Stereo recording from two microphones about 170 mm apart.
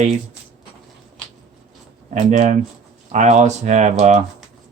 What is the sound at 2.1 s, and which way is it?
Speech, 45° right (ahead or behind).